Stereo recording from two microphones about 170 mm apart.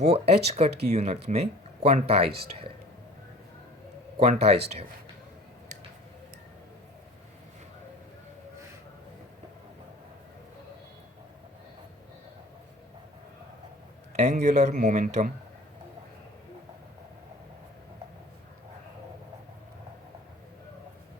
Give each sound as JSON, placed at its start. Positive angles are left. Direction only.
{"t": 0.0, "sound": "speech", "side_deg": -40}
{"t": 4.2, "sound": "speech", "side_deg": -40}
{"t": 14.1, "sound": "speech", "side_deg": -40}